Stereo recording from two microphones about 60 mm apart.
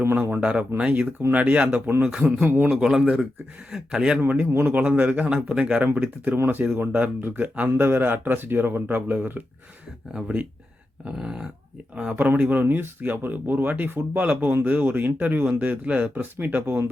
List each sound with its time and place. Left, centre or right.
0.2 s a man's voice: right
2.4 s speech: right
2.7 s speech: centre
4.2 s a man's voice: right
6.3 s speech: right
7.4 s a man's voice: right
7.8 s speech: right
10.1 s speech: centre
11.9 s a man's voice: right